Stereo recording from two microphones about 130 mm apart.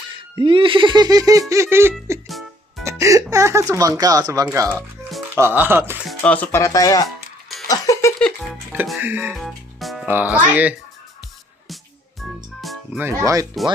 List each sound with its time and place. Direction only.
0.1 s speech: 40° right (ahead or behind); by 1.9 s 20° right (ahead or behind)
2.2 s music: centre (ahead or behind)
3.0 s music: 25° right (ahead or behind)
3.7 s speech: 25° right (ahead or behind)
6.1 s speech: 10° left (ahead or behind)
6.6 s speech: 25° left (ahead or behind)
7.7 s music: 25° left (ahead or behind)
9.0 s speech: 15° right (ahead or behind)
9.3 s music: centre (ahead or behind)
10.1 s speech: 15° right (ahead or behind)
12.2 s music: centre (ahead or behind)
13.0 s speech: 20° right (ahead or behind)